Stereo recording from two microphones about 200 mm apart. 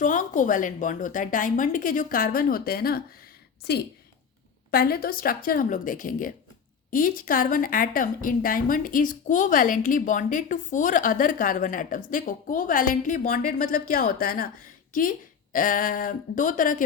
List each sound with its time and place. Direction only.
0.0 s a woman's voice: 40° left (ahead or behind)